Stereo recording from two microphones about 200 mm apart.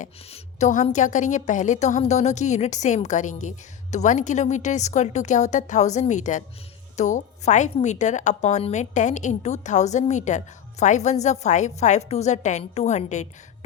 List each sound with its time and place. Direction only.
0.0 s speech: 35° left (ahead or behind)